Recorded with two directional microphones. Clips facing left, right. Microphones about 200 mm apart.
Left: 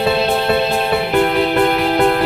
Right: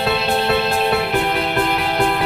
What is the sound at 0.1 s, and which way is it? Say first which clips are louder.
Music: left 1 dB; centre (ahead or behind).